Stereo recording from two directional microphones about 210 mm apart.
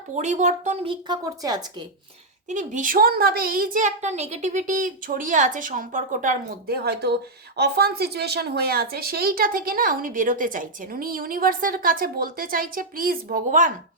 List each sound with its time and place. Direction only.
0.1 s a woman's voice: 35° right (ahead or behind); by 1.6 s 20° right (ahead or behind)
2.5 s a woman's voice: 35° right (ahead or behind)